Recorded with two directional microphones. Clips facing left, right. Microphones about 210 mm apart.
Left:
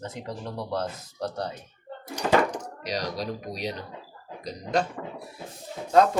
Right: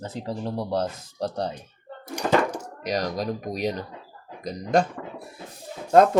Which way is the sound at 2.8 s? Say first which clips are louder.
Right 5 dB; 50° right (ahead or behind).